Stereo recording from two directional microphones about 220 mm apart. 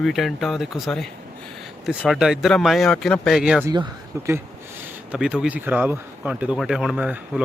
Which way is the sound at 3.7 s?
15° right (ahead or behind).